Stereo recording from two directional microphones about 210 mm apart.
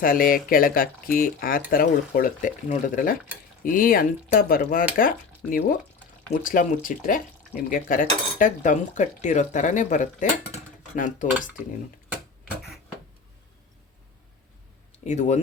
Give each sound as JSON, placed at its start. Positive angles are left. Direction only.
{"t": 0.0, "sound": "cutlery", "side_deg": 40}
{"t": 3.6, "sound": "speech", "side_deg": 40}
{"t": 6.4, "sound": "cutlery", "side_deg": 40}
{"t": 15.0, "sound": "cutlery", "side_deg": 35}